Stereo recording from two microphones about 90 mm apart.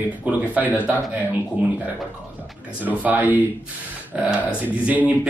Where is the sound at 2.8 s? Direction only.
20° right (ahead or behind).